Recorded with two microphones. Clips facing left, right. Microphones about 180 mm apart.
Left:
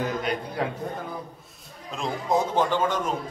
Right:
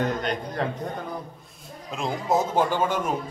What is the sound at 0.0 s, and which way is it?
Speech, 10° left (ahead or behind).